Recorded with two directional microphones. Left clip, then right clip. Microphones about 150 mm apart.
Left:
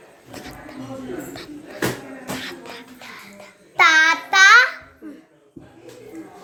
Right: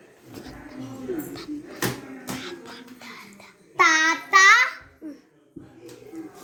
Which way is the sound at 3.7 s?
25° left (ahead or behind).